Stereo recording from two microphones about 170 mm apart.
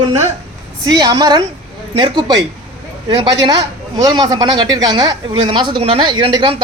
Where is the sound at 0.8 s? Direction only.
25° right (ahead or behind).